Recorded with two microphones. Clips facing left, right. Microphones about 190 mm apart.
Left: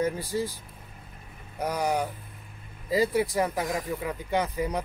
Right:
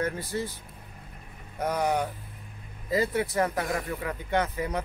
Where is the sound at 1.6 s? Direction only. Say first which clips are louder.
Right 1 dB; 10° left (ahead or behind).